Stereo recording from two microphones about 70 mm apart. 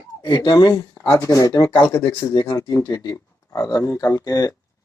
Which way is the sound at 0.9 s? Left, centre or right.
Left.